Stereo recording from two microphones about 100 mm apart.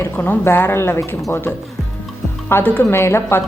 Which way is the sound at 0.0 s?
20° left (ahead or behind).